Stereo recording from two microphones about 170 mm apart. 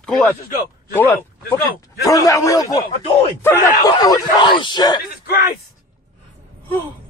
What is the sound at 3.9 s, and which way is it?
Speech, 20° left (ahead or behind).